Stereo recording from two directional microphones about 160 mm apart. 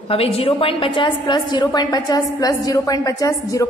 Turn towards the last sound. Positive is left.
turn(degrees=20)  # may be behind; listen again after turning